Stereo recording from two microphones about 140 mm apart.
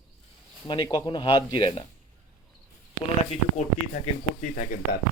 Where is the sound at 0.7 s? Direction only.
35° left (ahead or behind).